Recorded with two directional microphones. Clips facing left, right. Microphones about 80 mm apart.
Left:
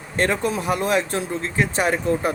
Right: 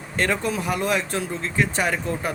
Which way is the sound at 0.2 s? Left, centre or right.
Left.